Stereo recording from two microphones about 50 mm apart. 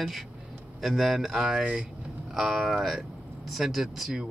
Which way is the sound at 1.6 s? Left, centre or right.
Centre.